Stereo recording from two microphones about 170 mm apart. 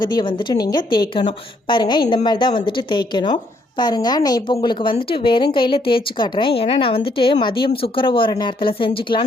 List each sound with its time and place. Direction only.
0.0 s a woman's voice: 25° left (ahead or behind)